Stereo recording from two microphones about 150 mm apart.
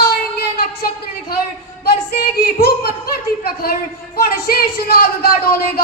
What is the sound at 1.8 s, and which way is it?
A woman's voice, 90° left.